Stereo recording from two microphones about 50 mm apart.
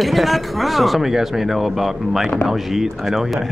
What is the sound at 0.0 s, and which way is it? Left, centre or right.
A man's voice, centre.